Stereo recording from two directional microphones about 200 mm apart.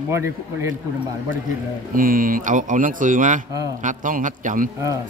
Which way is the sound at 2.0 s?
45° right (ahead or behind).